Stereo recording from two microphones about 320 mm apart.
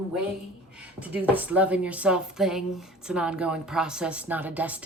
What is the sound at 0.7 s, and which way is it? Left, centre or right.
Speech, centre.